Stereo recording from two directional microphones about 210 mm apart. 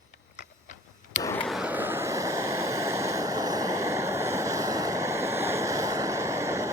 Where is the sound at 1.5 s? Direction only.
5° right (ahead or behind).